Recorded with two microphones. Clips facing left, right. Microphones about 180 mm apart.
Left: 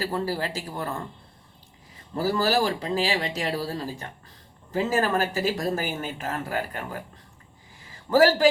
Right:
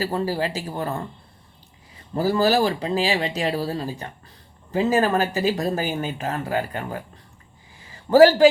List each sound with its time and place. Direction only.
0.0 s speech: 15° right (ahead or behind)
2.1 s speech: 15° right (ahead or behind)
8.2 s speech: 20° right (ahead or behind)